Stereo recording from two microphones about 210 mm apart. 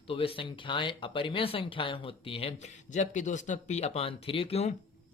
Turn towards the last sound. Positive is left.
turn(degrees=30)  # may be behind; listen again after turning